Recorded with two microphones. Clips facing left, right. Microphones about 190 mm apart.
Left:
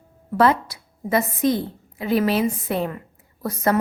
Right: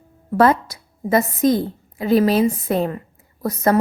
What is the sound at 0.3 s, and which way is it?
A woman's voice, 45° right (ahead or behind).